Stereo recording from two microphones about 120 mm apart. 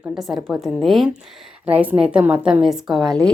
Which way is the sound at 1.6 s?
15° right (ahead or behind).